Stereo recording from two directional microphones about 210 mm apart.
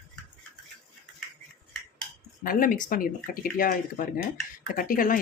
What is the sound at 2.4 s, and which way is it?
Speech, 40° left (ahead or behind).